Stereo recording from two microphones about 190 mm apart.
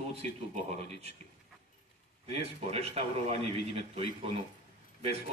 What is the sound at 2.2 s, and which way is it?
A man's voice, 30° right (ahead or behind).